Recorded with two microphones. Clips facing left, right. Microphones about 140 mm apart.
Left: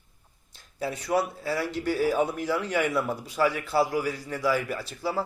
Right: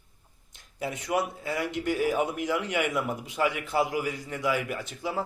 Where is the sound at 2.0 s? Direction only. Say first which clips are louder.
Left 2 dB; 35° left (ahead or behind).